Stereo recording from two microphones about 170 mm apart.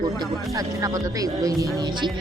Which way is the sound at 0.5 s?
20° right (ahead or behind).